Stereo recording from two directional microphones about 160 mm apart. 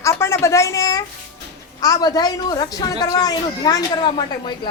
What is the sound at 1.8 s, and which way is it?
A man's voice, 25° left (ahead or behind).